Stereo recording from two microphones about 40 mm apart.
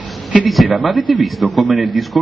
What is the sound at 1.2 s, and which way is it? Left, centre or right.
Speech, centre.